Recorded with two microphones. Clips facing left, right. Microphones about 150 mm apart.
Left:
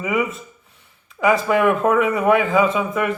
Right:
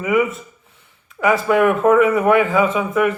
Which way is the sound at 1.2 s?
Centre (ahead or behind).